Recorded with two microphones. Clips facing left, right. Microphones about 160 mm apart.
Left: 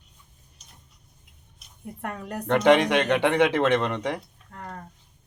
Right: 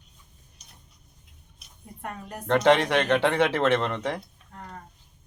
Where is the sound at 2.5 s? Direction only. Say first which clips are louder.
Left 1 dB; 15° left (ahead or behind).